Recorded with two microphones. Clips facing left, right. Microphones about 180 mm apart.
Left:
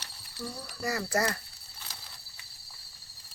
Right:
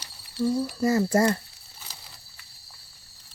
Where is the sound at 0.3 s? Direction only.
25° right (ahead or behind).